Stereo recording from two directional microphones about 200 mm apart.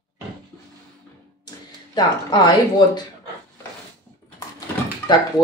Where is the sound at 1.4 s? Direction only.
20° left (ahead or behind).